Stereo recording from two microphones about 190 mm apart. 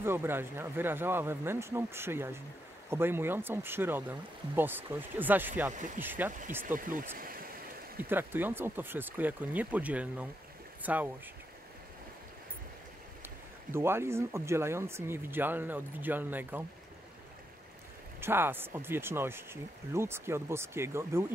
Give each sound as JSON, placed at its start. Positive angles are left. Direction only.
{"t": 0.0, "sound": "speech", "side_deg": -10}
{"t": 6.6, "sound": "speech", "side_deg": -45}
{"t": 8.0, "sound": "speech", "side_deg": -10}
{"t": 13.7, "sound": "speech", "side_deg": -15}
{"t": 18.2, "sound": "speech", "side_deg": -10}